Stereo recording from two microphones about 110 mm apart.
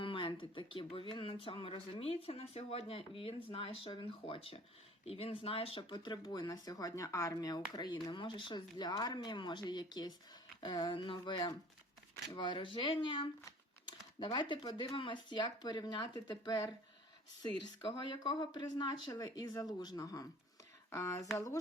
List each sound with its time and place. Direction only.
0.0 s speech: 50° left (ahead or behind); by 21.6 s 30° left (ahead or behind)